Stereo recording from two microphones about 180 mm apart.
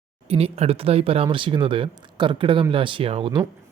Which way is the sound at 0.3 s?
35° right (ahead or behind).